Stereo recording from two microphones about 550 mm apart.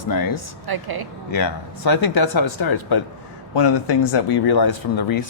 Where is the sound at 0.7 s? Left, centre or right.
Right.